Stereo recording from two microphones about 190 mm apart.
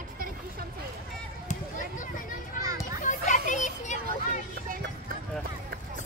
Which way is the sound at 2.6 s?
20° right (ahead or behind).